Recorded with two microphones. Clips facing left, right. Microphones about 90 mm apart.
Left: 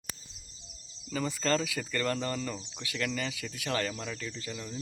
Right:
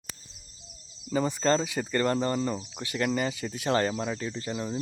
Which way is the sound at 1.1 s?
25° right (ahead or behind).